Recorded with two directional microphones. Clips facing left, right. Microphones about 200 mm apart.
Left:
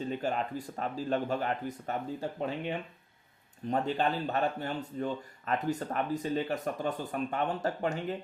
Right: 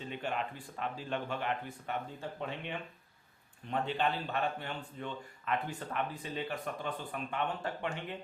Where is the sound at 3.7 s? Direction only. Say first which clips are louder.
Left 4 dB; 40° left (ahead or behind).